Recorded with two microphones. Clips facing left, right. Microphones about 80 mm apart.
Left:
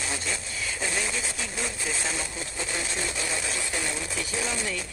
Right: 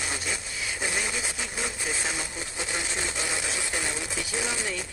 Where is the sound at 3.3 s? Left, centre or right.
Right.